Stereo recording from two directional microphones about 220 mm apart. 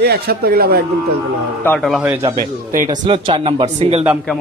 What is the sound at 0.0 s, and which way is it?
Speech, 45° right (ahead or behind).